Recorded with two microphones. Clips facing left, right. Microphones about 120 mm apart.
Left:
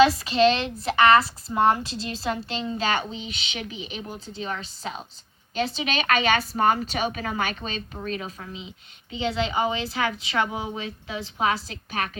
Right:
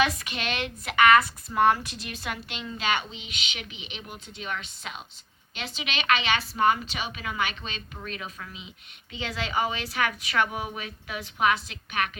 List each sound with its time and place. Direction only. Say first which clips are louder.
0.0 s a woman's voice: left 10 dB; 30° left (ahead or behind)